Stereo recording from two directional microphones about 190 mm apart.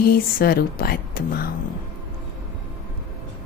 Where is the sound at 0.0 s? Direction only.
50° left (ahead or behind).